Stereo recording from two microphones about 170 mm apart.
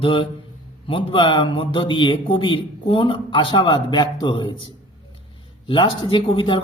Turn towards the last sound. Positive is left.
turn(degrees=30)  # may be behind; listen again after turning